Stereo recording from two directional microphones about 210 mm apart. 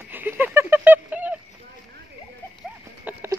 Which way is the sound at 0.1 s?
10° right (ahead or behind).